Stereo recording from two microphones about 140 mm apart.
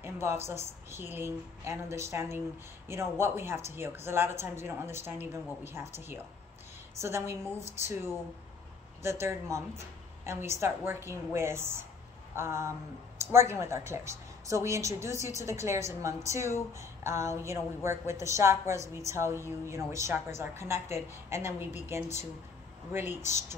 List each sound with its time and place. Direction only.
0.0 s a woman's voice: 20° right (ahead or behind)